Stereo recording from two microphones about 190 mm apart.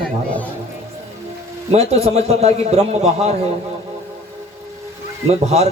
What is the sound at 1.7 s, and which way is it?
A man's voice, 35° right (ahead or behind).